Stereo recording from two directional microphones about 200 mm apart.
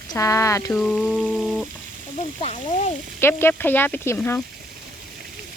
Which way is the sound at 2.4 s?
35° left (ahead or behind).